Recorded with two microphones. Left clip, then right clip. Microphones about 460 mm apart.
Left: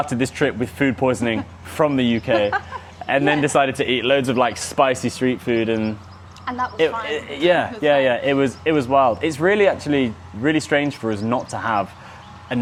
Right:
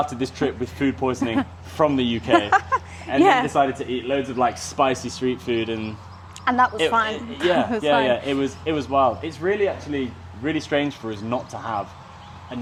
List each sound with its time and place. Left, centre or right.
0.0 s speech: left
3.1 s speech: left; by 5.9 s centre
6.4 s speech: right
7.0 s speech: left
10.4 s speech: left